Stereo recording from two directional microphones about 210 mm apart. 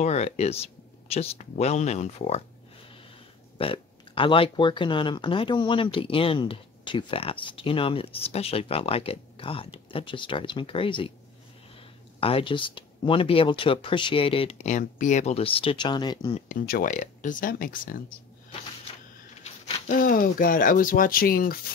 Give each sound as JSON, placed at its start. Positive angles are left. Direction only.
{"t": 0.0, "sound": "speech", "side_deg": 30}
{"t": 3.5, "sound": "speech", "side_deg": 25}
{"t": 12.2, "sound": "speech", "side_deg": 25}
{"t": 16.4, "sound": "speech", "side_deg": 40}
{"t": 19.4, "sound": "speech", "side_deg": 35}